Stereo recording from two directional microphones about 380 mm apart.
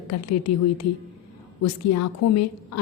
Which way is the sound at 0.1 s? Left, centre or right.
Left.